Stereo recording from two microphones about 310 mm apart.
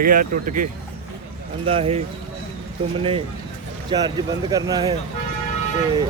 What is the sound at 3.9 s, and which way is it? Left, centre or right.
Speech, centre.